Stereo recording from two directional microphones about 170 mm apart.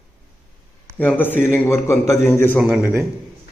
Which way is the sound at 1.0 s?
10° left (ahead or behind).